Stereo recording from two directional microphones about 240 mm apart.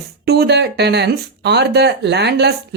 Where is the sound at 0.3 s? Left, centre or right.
Right.